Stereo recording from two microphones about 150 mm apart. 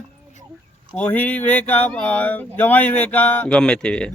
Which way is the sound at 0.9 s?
10° left (ahead or behind).